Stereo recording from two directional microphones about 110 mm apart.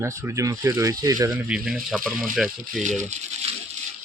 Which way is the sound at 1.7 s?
Centre (ahead or behind).